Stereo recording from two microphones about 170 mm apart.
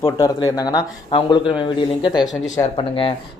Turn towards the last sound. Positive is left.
turn(degrees=30)  # may be behind; listen again after turning